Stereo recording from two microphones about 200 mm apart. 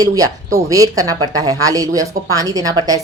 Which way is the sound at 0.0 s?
15° right (ahead or behind).